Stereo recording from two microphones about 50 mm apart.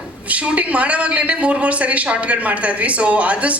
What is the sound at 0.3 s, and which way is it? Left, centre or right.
A woman's voice, right.